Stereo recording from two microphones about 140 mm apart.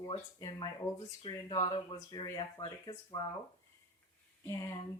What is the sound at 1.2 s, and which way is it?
Speech, 40° left (ahead or behind).